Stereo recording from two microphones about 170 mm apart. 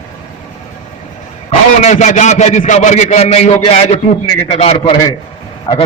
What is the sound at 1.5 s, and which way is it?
A man's voice, 45° left (ahead or behind).